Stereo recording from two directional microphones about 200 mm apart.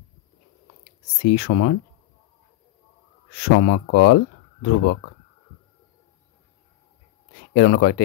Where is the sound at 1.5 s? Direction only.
90° left.